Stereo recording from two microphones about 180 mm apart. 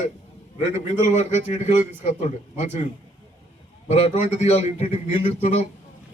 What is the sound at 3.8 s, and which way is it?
A man's voice, 35° left (ahead or behind).